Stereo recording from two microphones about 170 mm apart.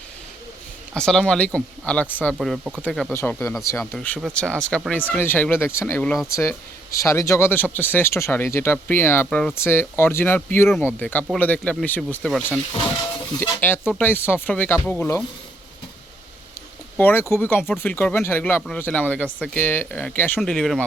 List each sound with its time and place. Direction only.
0.9 s speech: 5° left (ahead or behind)
2.4 s speech: 5° right (ahead or behind)
13.6 s speech: 10° left (ahead or behind)
17.0 s speech: 10° left (ahead or behind)